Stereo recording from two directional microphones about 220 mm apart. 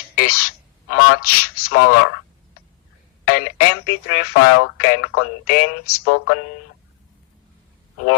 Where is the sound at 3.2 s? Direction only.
90° left.